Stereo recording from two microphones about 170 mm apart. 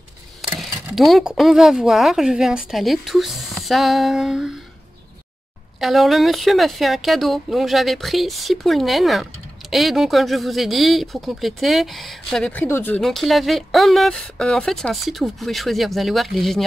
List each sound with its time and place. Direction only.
0.4 s speech: centre (ahead or behind)
5.8 s speech: centre (ahead or behind)